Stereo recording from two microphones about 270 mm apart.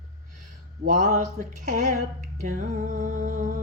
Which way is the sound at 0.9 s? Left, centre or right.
Right.